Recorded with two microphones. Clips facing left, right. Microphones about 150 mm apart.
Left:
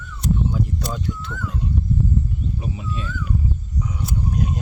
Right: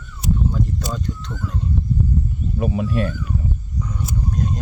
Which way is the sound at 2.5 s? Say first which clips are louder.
Right 8 dB; 60° right (ahead or behind).